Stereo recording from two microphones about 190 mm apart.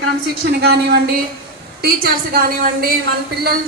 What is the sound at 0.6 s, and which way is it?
A woman's voice, 60° right (ahead or behind).